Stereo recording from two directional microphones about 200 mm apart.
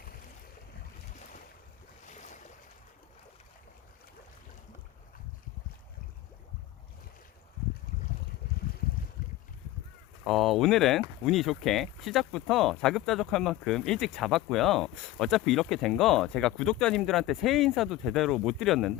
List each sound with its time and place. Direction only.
2.0 s boat: 35° left (ahead or behind)
10.2 s speech: centre (ahead or behind)